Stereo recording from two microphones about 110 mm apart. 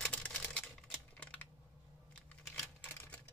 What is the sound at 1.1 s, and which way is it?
Typing, 10° left (ahead or behind).